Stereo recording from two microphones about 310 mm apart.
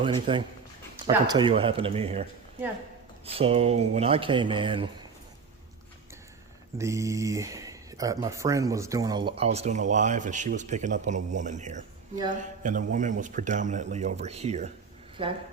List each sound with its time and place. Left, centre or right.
0.0 s speech: centre
3.2 s speech: centre
6.7 s speech: centre